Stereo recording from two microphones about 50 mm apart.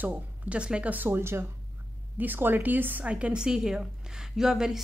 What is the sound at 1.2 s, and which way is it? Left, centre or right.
Speech, right.